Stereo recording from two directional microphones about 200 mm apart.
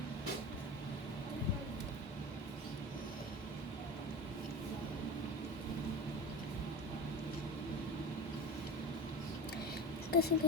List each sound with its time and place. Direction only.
10.1 s rodents: 55° left (ahead or behind)